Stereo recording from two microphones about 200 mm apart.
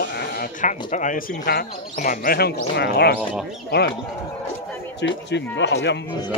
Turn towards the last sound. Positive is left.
turn(degrees=60)  # may be behind; listen again after turning